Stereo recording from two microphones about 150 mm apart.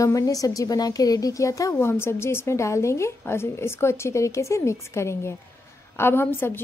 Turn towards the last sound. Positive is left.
turn(degrees=15)  # may be behind; listen again after turning